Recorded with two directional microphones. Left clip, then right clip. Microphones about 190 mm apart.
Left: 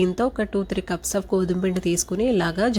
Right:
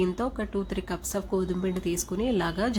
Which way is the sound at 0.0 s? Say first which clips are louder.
Left 6 dB; 30° left (ahead or behind).